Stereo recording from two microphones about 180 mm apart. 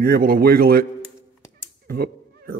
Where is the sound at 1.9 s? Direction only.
55° right (ahead or behind).